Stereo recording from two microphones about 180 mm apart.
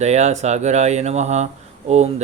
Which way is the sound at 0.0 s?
40° right (ahead or behind).